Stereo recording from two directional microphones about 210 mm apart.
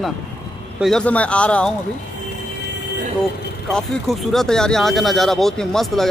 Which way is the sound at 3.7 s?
Centre (ahead or behind).